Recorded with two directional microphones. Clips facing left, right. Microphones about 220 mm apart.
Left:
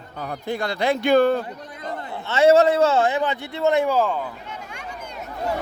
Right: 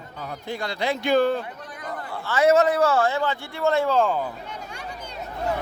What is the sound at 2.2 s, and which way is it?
A man's voice, 25° left (ahead or behind).